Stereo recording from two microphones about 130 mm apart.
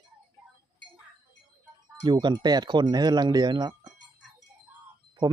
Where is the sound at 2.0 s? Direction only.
35° right (ahead or behind).